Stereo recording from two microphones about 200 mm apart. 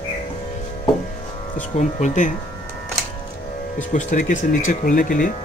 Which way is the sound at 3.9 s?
40° left (ahead or behind).